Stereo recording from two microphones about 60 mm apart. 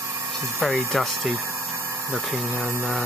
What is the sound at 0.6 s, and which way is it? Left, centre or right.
Speech, centre.